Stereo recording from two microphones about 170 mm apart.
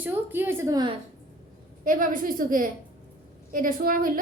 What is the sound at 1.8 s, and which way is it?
A woman's voice, 55° right (ahead or behind).